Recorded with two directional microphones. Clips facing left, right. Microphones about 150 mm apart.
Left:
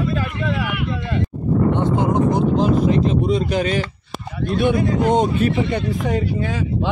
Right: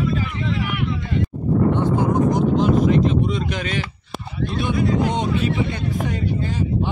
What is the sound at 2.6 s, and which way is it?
Speech, 35° left (ahead or behind).